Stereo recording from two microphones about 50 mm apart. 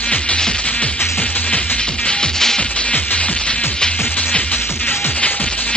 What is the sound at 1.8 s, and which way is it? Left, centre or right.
Music, centre.